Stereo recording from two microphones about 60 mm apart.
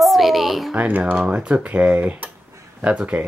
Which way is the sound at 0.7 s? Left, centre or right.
Right.